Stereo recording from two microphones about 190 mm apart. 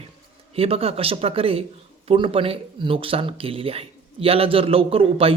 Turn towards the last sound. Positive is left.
turn(degrees=-30)  # may be behind; listen again after turning